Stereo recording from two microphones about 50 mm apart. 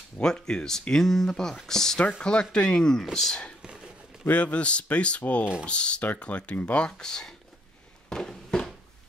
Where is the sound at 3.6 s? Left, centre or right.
Centre.